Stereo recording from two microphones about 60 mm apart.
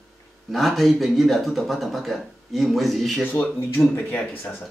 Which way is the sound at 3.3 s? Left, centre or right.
Left.